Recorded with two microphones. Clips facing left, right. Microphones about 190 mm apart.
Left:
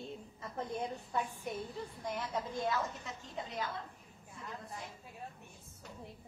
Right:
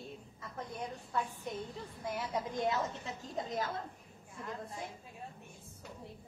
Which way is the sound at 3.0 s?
40° right (ahead or behind).